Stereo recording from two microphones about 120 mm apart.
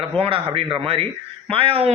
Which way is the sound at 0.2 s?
50° right (ahead or behind).